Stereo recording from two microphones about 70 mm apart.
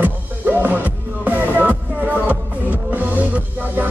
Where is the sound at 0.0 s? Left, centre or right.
Right.